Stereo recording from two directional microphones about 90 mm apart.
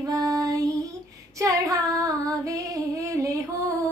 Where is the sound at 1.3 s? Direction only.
40° right (ahead or behind).